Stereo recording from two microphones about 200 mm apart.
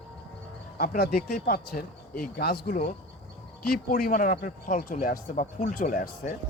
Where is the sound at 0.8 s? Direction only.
45° left (ahead or behind).